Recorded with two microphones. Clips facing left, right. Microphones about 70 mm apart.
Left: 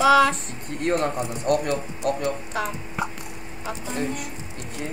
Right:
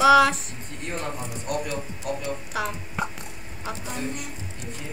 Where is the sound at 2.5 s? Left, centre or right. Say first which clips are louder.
Left 1 dB; centre.